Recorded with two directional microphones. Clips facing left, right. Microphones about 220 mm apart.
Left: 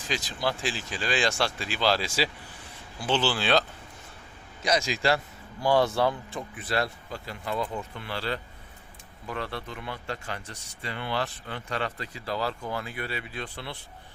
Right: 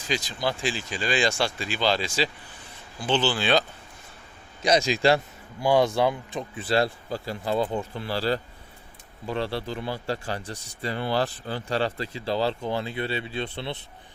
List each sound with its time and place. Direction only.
0.1 s speech: centre (ahead or behind)
4.6 s speech: 20° right (ahead or behind)
6.6 s speech: 30° right (ahead or behind)